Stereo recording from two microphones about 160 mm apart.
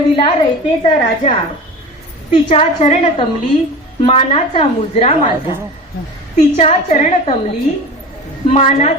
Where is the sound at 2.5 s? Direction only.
45° left (ahead or behind).